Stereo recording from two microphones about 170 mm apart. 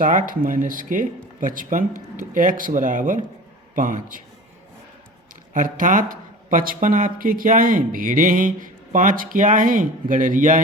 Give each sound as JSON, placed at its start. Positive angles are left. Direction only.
{"t": 0.0, "sound": "speech", "side_deg": -50}
{"t": 5.5, "sound": "speech", "side_deg": -50}